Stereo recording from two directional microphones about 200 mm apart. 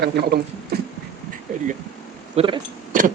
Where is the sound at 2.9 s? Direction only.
40° right (ahead or behind).